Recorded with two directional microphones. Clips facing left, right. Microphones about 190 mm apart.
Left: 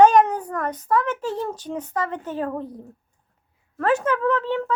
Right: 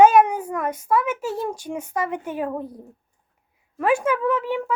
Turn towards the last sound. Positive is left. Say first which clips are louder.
# even
turn(degrees=-10)  # may be behind; listen again after turning